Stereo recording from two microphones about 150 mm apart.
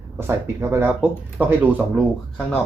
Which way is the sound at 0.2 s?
15° right (ahead or behind).